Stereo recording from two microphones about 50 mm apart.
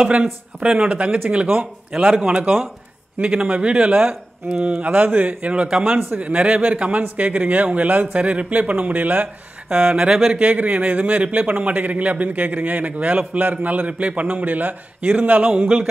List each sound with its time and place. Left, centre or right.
0.0 s a man's voice: right
3.2 s a man's voice: right
9.8 s a man's voice: centre
10.3 s a man's voice: right